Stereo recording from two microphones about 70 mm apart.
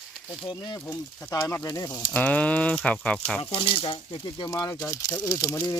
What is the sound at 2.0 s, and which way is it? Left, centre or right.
Speech, centre.